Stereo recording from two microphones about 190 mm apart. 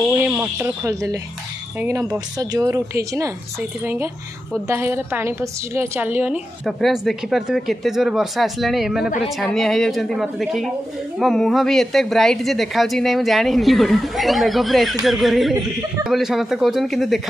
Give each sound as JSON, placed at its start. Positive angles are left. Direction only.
{"t": 0.2, "sound": "a woman's voice", "side_deg": -10}